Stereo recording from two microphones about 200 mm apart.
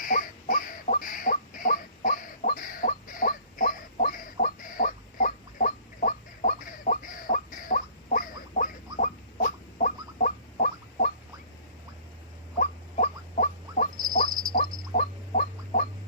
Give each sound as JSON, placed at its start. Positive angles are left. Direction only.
{"t": 0.0, "sound": "a sound", "side_deg": 40}
{"t": 12.5, "sound": "rodents", "side_deg": 40}
{"t": 14.9, "sound": "gargling", "side_deg": 45}